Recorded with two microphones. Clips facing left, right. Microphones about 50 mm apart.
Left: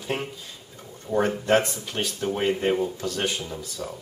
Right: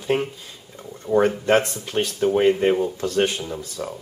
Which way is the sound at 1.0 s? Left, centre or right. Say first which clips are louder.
Right 5 dB; right.